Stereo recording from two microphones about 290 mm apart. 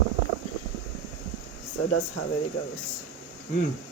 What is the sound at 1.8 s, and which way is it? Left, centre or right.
Speech, left.